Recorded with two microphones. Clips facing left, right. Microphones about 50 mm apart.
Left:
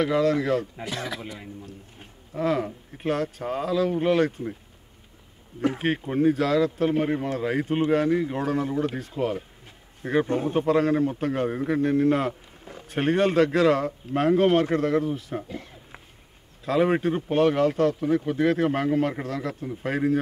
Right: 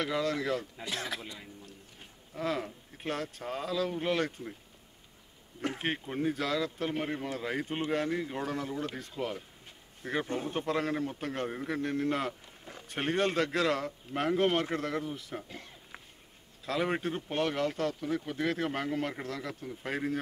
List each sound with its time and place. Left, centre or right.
0.0 s speech: centre
1.6 s a sound: left
2.4 s speech: centre
5.8 s speech: centre
16.6 s speech: centre